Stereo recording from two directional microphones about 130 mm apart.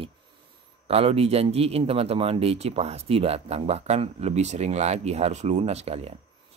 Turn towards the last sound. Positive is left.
turn(degrees=-50)  # may be behind; listen again after turning